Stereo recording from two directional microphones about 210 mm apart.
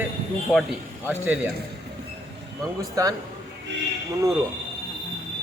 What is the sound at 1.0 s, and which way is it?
Speech, 10° right (ahead or behind).